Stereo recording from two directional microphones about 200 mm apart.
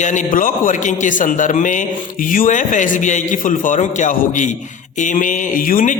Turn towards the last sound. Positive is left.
turn(degrees=40)  # may be behind; listen again after turning